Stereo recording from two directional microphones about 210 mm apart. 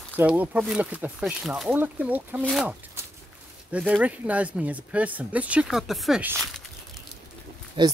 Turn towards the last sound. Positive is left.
turn(degrees=-20)  # may be behind; listen again after turning